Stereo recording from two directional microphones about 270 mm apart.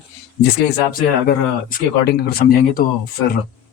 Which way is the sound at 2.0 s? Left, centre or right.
Left.